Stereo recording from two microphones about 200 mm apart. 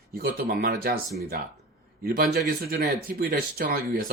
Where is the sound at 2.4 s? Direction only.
50° right (ahead or behind).